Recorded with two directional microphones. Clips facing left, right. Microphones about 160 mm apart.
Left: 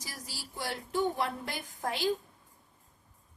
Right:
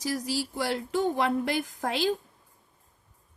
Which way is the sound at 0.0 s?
90° right.